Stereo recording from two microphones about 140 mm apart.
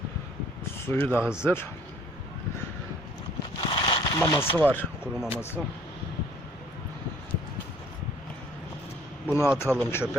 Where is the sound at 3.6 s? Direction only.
35° left (ahead or behind).